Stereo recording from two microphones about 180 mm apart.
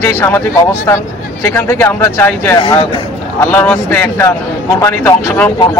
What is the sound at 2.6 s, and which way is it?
Speech, 25° left (ahead or behind).